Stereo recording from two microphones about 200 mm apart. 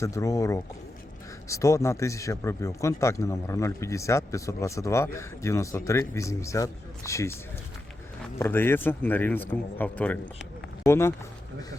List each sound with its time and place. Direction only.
0.0 s a man's voice: 15° left (ahead or behind)
8.4 s a man's voice: 10° left (ahead or behind)